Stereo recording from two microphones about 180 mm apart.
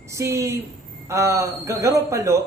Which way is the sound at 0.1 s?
15° right (ahead or behind).